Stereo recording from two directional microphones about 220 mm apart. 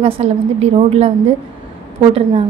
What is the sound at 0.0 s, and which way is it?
A woman's voice, 30° right (ahead or behind).